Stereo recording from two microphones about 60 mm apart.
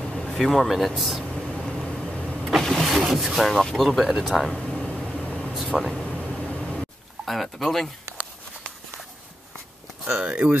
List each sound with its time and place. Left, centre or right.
0.1 s air conditioning: centre
2.0 s vehicle: centre
4.2 s speech: centre
4.6 s vehicle: centre
5.8 s speech: centre
6.2 s vehicle: centre
6.7 s a sound: centre
10.0 s speech: centre